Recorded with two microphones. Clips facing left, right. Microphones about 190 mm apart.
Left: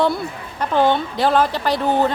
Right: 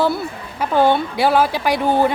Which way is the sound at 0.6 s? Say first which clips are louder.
Right 2 dB; 10° right (ahead or behind).